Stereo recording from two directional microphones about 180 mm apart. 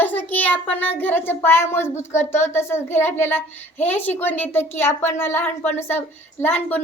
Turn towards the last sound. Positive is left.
turn(degrees=10)  # may be behind; listen again after turning